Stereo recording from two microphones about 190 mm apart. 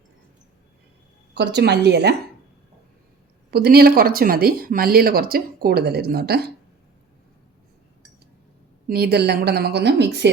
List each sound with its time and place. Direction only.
1.3 s a woman's voice: 65° right (ahead or behind)
3.5 s speech: 55° right (ahead or behind)
8.9 s a woman's voice: 55° right (ahead or behind)